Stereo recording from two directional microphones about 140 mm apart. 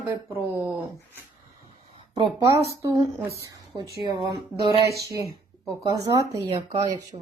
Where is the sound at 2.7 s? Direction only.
20° right (ahead or behind).